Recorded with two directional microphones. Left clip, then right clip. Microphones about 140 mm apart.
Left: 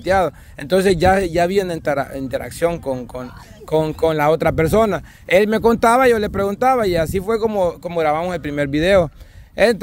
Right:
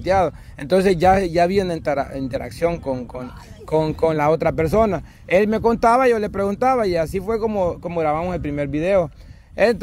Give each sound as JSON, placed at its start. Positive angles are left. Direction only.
{"t": 0.0, "sound": "speech", "side_deg": 20}
{"t": 3.6, "sound": "speech", "side_deg": 20}
{"t": 9.6, "sound": "speech", "side_deg": 25}